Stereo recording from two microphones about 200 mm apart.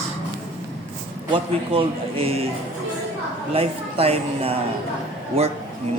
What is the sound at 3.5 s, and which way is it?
Speech, 30° right (ahead or behind).